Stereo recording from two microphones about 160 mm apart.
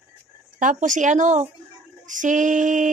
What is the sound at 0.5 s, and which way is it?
Speech, 55° right (ahead or behind).